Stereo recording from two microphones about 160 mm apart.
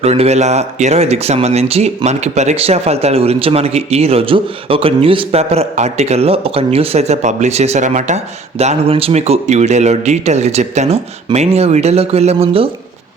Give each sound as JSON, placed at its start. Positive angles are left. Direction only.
{"t": 0.0, "sound": "speech", "side_deg": -40}